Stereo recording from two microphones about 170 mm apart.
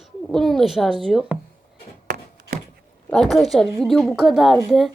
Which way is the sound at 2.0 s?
70° right (ahead or behind).